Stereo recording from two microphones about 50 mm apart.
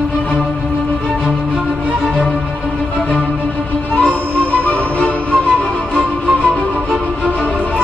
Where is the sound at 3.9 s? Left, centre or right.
Left.